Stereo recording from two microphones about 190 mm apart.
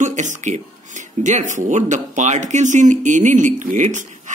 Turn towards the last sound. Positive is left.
turn(degrees=-40)  # may be behind; listen again after turning